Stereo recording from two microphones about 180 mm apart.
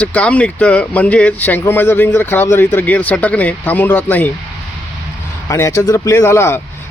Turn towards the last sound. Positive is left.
turn(degrees=15)  # may be behind; listen again after turning